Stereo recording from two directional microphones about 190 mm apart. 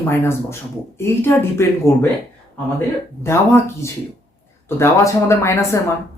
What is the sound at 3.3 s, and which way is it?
Speech, 15° left (ahead or behind).